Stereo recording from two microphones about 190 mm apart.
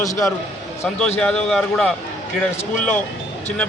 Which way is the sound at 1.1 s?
5° left (ahead or behind).